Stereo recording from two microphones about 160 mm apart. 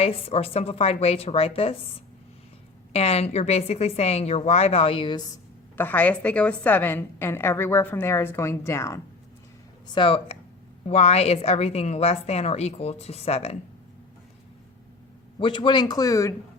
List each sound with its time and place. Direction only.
0.0 s a woman's voice: 35° left (ahead or behind)
5.7 s a woman's voice: 10° left (ahead or behind)
9.9 s a woman's voice: 35° left (ahead or behind)
15.4 s speech: 30° left (ahead or behind)